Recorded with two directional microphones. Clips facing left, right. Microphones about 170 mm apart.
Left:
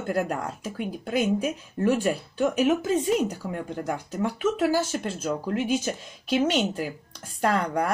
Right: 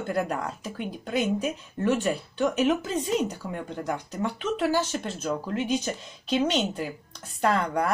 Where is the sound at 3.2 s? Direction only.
45° left (ahead or behind).